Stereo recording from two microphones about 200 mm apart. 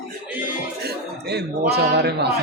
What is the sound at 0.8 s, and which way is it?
A man's voice, 55° right (ahead or behind).